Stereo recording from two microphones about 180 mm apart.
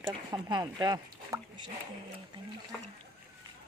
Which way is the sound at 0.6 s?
20° right (ahead or behind).